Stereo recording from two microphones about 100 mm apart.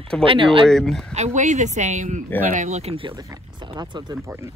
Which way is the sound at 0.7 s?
5° left (ahead or behind).